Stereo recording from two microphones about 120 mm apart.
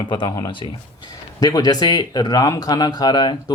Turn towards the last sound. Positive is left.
turn(degrees=35)  # may be behind; listen again after turning